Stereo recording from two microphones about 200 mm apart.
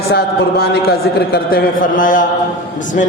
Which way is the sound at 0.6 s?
50° left (ahead or behind).